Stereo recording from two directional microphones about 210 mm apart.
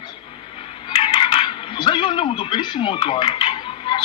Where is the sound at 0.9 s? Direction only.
25° left (ahead or behind).